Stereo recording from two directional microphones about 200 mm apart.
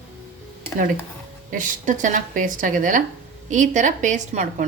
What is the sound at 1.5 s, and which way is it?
A woman's voice, 40° right (ahead or behind).